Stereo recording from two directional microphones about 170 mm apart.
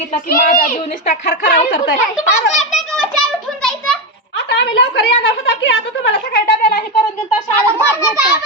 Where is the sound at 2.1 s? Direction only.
Centre (ahead or behind).